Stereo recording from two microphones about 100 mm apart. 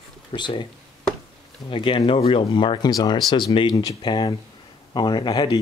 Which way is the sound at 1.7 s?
60° left (ahead or behind).